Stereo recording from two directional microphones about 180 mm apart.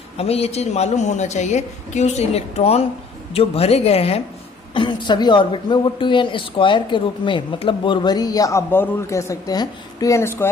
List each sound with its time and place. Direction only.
0.2 s a woman's voice: 35° left (ahead or behind); by 10.5 s 15° left (ahead or behind)